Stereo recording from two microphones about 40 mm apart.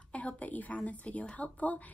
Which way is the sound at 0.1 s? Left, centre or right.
Left.